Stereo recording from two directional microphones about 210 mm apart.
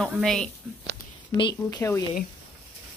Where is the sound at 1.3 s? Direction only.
20° left (ahead or behind).